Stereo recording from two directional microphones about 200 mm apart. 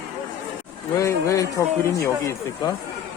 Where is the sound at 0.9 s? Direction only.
15° left (ahead or behind).